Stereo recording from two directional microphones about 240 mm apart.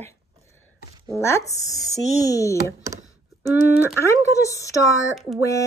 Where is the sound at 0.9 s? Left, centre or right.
Centre.